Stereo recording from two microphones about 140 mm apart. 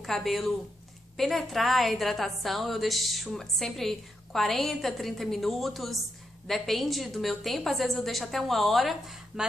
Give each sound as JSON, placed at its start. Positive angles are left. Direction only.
{"t": 0.0, "sound": "a woman's voice", "side_deg": 0}